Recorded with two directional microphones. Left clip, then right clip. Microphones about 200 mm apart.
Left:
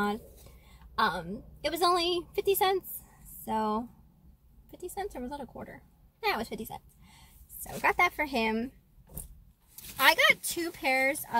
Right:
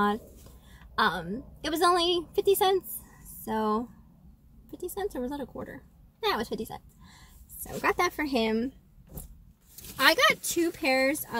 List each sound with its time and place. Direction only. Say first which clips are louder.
0.9 s a woman's voice: right 2 dB; 5° left (ahead or behind)
7.8 s a woman's voice: left 1 dB; centre (ahead or behind)
10.0 s a woman's voice: right 1 dB; centre (ahead or behind)